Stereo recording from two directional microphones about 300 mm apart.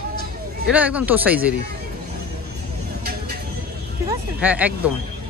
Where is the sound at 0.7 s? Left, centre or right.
Centre.